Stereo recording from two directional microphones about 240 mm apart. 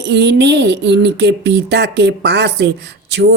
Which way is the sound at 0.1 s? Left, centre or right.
Right.